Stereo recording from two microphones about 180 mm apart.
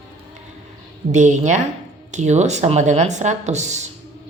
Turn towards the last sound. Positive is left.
turn(degrees=-40)  # may be behind; listen again after turning